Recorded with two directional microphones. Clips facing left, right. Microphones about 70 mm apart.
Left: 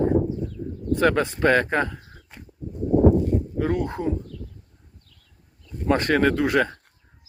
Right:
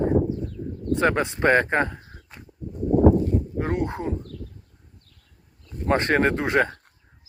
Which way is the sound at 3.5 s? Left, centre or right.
Right.